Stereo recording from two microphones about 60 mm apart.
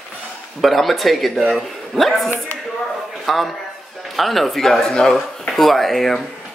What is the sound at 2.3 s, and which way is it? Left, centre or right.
Speech, left.